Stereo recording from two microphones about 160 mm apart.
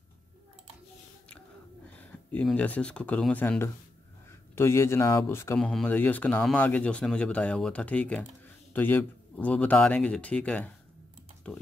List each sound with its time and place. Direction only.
2.3 s speech: 10° left (ahead or behind)
5.6 s speech: 5° left (ahead or behind)